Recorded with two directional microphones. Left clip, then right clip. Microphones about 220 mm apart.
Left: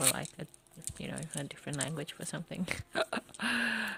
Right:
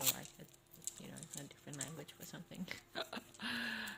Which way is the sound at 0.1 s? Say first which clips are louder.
Left 8 dB; 40° left (ahead or behind).